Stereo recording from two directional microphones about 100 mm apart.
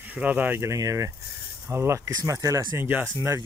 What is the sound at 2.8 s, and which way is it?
Speech, 20° right (ahead or behind).